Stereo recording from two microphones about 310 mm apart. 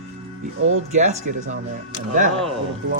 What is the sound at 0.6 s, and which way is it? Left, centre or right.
Speech, right.